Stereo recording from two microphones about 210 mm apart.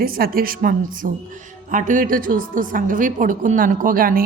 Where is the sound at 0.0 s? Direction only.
45° right (ahead or behind).